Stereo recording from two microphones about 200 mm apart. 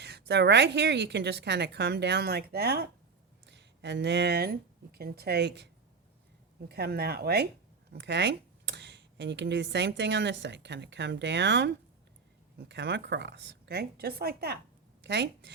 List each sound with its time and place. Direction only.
0.0 s speech: 60° right (ahead or behind)
6.7 s speech: 50° right (ahead or behind)